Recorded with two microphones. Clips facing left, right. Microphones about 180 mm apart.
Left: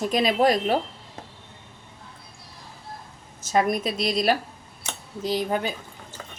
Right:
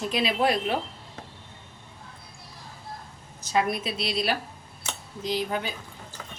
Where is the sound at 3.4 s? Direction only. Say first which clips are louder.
Left 3 dB; 45° left (ahead or behind).